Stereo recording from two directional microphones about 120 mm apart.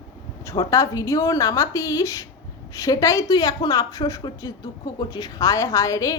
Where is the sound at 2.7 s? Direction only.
25° left (ahead or behind).